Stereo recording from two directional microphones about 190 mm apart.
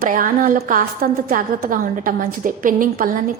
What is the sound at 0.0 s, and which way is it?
A woman's voice, 45° right (ahead or behind).